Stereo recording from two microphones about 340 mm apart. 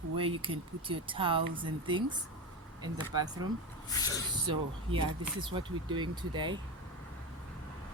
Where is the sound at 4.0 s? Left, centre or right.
Centre.